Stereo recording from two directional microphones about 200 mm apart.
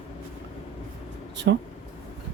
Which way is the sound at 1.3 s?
60° right (ahead or behind).